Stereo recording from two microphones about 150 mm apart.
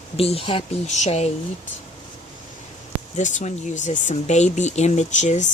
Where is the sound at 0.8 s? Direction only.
50° left (ahead or behind).